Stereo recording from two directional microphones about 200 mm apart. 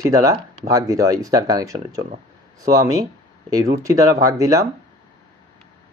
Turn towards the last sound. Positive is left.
turn(degrees=-15)  # may be behind; listen again after turning